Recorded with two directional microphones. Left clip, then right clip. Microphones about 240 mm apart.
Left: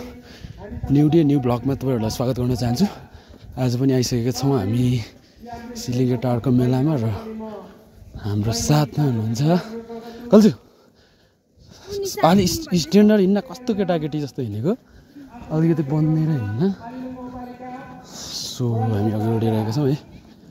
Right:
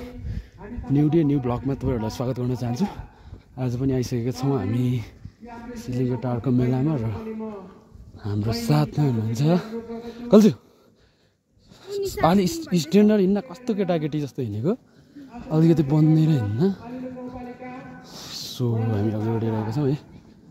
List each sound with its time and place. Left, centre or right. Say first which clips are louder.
0.6 s a sound: left 2 dB; right
0.9 s speech: left 4 dB; centre
8.2 s insect: left 3 dB; centre
11.8 s speech: left 3 dB; centre
15.5 s speech: right 1 dB; centre
16.5 s speech: even; centre
18.0 s snake: left 5 dB; centre
19.3 s speech: left 4 dB; centre